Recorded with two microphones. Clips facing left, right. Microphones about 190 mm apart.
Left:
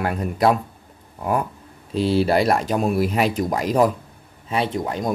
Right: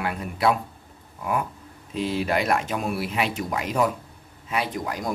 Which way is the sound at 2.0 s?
35° left (ahead or behind).